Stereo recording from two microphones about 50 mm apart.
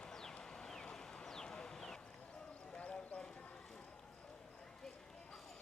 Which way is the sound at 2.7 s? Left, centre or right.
Left.